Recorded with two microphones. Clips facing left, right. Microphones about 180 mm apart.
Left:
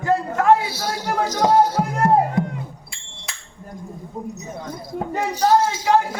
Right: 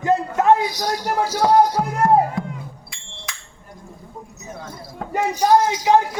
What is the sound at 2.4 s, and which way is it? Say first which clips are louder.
Music: left 5 dB; 20° left (ahead or behind).